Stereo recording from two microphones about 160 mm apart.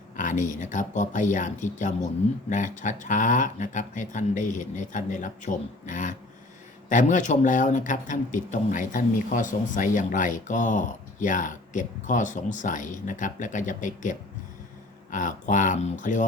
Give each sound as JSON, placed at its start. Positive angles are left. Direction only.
{"t": 0.2, "sound": "speech", "side_deg": 55}